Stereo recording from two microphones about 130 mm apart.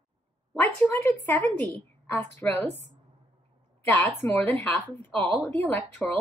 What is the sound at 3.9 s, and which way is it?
A woman's voice, 15° left (ahead or behind).